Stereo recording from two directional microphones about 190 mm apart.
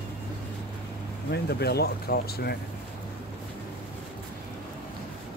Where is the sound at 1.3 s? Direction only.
60° left (ahead or behind).